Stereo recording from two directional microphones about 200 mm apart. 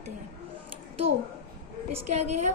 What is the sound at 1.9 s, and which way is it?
Speech, 35° right (ahead or behind).